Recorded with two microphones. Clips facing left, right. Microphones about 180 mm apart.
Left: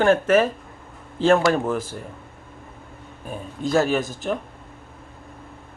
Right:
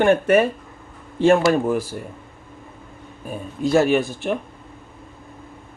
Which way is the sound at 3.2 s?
10° right (ahead or behind).